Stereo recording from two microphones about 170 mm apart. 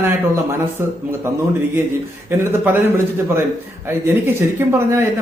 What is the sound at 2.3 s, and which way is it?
Speech, 15° right (ahead or behind).